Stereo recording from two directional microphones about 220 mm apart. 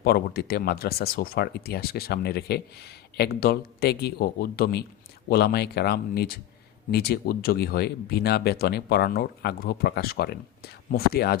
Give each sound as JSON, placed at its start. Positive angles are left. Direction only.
{"t": 0.0, "sound": "speech", "side_deg": 45}